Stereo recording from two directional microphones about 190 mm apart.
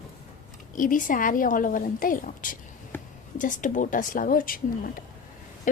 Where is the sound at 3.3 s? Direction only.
45° left (ahead or behind).